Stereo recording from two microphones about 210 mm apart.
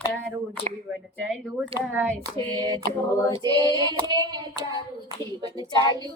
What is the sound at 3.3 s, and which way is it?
Hands, 20° right (ahead or behind).